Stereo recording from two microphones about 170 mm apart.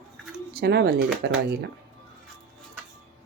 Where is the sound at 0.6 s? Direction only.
70° right (ahead or behind).